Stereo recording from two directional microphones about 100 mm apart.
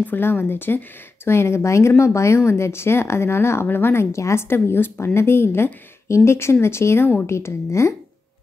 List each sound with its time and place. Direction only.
0.0 s speech: 20° left (ahead or behind)